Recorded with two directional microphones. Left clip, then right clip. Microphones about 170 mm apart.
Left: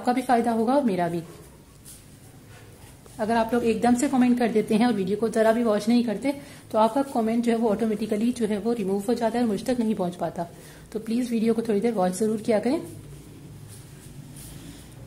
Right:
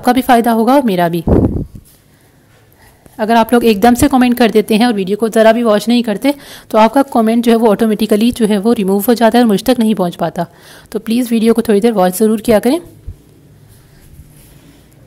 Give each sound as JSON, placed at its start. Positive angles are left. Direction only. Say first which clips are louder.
{"t": 0.0, "sound": "a woman's voice", "louder": "right 12 dB", "side_deg": -50}
{"t": 3.2, "sound": "a woman's voice", "louder": "right 13 dB", "side_deg": -50}